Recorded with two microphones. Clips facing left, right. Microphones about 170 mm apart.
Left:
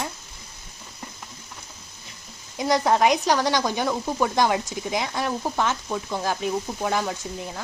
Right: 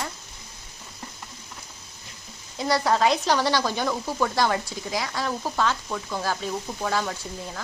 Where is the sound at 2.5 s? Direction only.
15° left (ahead or behind).